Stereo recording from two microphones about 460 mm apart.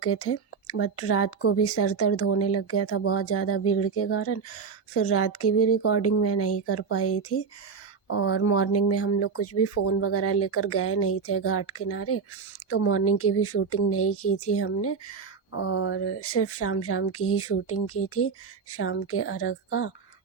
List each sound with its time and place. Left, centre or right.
0.0 s speech: left